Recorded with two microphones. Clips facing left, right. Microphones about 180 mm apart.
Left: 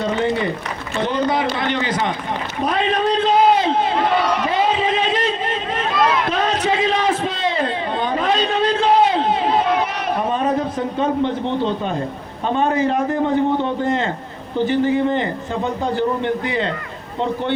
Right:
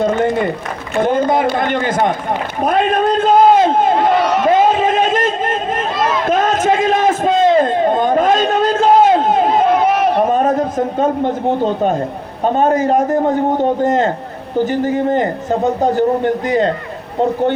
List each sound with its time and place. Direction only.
0.0 s a man's voice: 50° right (ahead or behind)
2.6 s run: 50° right (ahead or behind)
4.5 s a sound: 45° right (ahead or behind)
5.9 s run: 25° right (ahead or behind)
6.2 s a sound: 45° right (ahead or behind)
12.5 s a man's voice: 45° right (ahead or behind)